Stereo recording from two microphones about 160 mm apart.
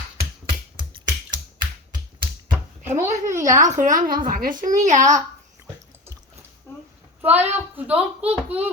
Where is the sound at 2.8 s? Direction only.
50° right (ahead or behind).